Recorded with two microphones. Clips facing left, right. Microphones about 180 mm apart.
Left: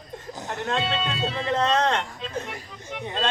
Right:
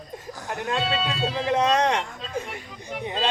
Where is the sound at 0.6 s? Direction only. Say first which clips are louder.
Right 1 dB; 5° right (ahead or behind).